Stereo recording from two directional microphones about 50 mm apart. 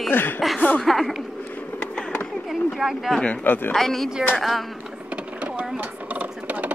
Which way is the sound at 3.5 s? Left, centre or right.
Left.